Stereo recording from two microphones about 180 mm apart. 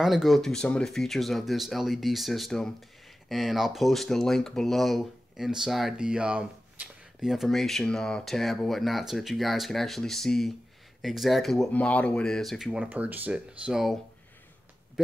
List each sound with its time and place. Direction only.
0.0 s speech: centre (ahead or behind)